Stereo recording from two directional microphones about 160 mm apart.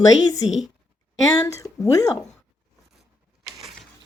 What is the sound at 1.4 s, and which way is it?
Speech, 20° left (ahead or behind).